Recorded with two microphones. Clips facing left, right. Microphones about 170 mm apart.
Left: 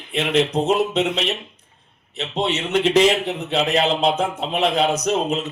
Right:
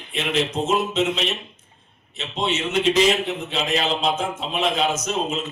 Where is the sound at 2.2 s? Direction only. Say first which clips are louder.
Left 2 dB; 65° left (ahead or behind).